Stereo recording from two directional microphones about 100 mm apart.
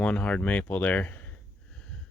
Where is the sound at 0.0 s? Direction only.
15° left (ahead or behind).